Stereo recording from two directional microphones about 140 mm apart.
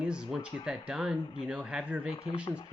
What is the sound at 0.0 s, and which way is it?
Speech, 5° right (ahead or behind).